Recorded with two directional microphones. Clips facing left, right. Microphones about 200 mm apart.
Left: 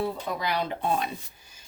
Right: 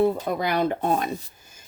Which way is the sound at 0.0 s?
50° right (ahead or behind).